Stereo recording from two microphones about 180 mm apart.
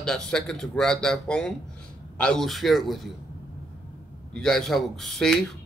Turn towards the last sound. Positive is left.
turn(degrees=0)  # may be behind; listen again after turning